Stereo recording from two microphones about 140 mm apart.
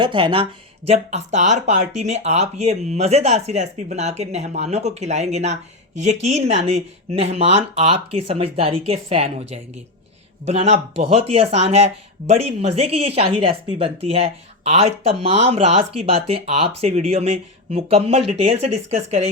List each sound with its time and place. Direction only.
0.0 s speech: 35° right (ahead or behind)
0.9 s speech: 50° right (ahead or behind)